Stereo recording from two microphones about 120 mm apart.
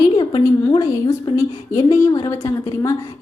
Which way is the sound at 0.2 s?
40° left (ahead or behind).